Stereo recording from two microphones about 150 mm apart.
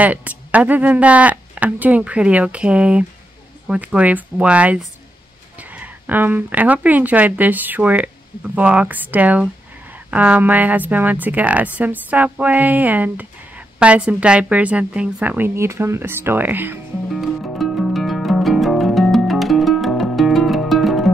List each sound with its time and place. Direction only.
0.0 s a woman's voice: 10° right (ahead or behind)
17.1 s music: centre (ahead or behind)